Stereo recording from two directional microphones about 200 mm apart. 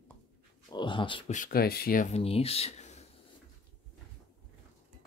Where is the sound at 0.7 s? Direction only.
25° left (ahead or behind).